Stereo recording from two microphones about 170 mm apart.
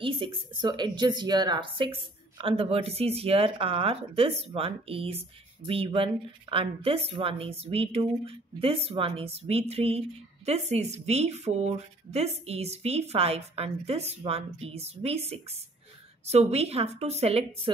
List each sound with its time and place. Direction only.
0.0 s a woman's voice: 30° right (ahead or behind)